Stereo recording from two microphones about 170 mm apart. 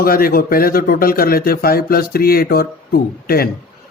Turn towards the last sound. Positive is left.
turn(degrees=60)  # may be behind; listen again after turning